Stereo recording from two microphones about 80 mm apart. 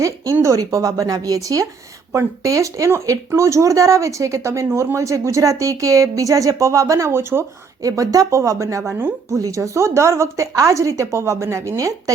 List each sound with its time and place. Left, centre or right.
0.4 s speech: right
7.8 s speech: right
8.9 s speech: right
9.3 s speech: right